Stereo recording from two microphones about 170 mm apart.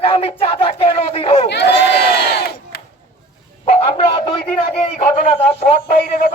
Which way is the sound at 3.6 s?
35° left (ahead or behind).